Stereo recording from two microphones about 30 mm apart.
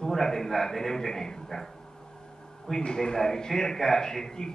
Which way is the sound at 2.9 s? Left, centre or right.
Left.